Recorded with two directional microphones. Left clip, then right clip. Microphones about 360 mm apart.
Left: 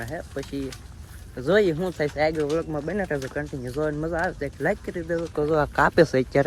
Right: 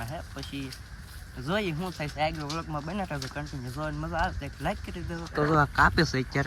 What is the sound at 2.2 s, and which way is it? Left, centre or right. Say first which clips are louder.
Speech: left 6 dB; centre.